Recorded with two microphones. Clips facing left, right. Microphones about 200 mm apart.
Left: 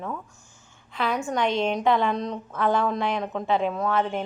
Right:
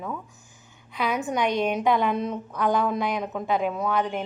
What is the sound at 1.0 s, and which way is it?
A woman's voice, 15° right (ahead or behind).